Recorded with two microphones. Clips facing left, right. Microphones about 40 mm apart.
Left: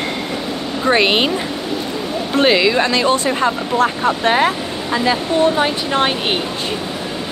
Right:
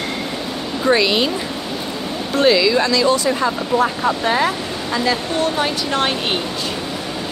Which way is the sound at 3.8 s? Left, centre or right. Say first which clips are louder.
Left 1 dB; left.